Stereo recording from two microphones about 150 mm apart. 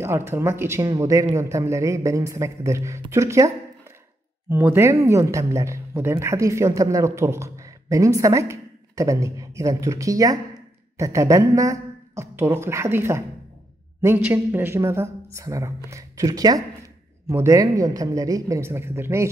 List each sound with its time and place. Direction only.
0.0 s a woman's voice: 15° right (ahead or behind)